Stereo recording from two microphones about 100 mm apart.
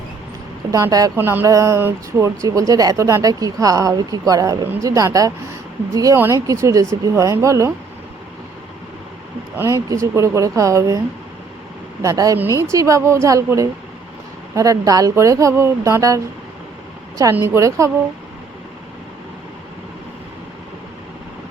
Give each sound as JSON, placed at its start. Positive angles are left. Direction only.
{"t": 0.7, "sound": "speech", "side_deg": -35}
{"t": 1.1, "sound": "a sound", "side_deg": -20}
{"t": 1.5, "sound": "speech", "side_deg": -30}
{"t": 9.6, "sound": "speech", "side_deg": -30}
{"t": 12.0, "sound": "speech", "side_deg": -35}
{"t": 17.4, "sound": "speech", "side_deg": -30}